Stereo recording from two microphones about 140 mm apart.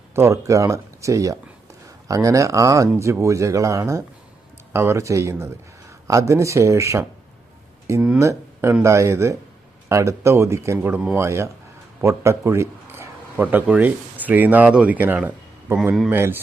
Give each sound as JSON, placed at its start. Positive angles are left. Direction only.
{"t": 0.1, "sound": "a man's voice", "side_deg": -20}
{"t": 16.0, "sound": "speech", "side_deg": -15}